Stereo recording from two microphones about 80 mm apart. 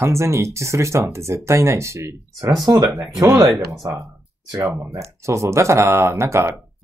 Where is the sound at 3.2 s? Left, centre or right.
Right.